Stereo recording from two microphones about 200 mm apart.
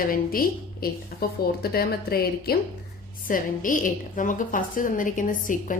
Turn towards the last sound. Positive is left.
turn(degrees=40)  # may be behind; listen again after turning